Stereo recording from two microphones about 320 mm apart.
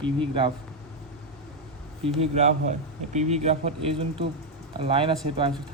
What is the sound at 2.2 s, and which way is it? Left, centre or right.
A man's voice, right.